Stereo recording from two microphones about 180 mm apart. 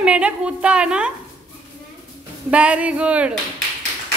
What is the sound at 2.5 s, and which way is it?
Speech, 5° right (ahead or behind).